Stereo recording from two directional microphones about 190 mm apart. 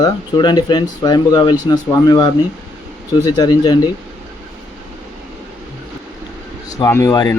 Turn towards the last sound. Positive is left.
turn(degrees=20)  # may be behind; listen again after turning